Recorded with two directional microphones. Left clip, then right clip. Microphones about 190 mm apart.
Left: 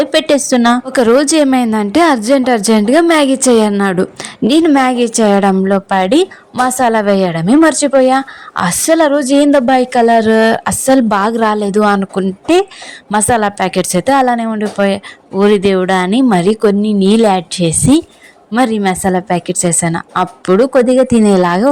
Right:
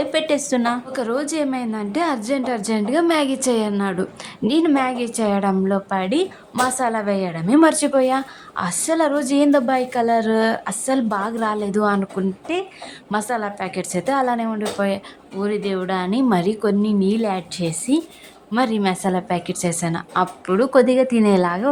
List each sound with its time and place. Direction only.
0.0 s a woman's voice: 35° left (ahead or behind)